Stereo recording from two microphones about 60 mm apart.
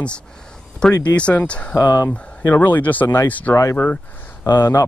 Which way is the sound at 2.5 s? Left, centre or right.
Left.